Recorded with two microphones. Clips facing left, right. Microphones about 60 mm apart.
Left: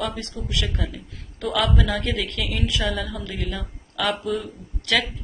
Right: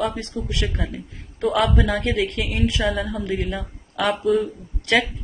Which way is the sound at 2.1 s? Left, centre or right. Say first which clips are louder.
Right 4 dB; right.